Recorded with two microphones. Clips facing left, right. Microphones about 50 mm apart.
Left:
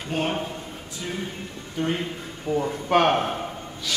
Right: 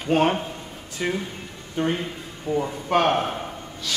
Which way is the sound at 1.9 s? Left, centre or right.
Centre.